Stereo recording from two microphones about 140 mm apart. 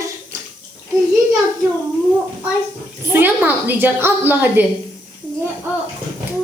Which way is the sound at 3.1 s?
15° right (ahead or behind).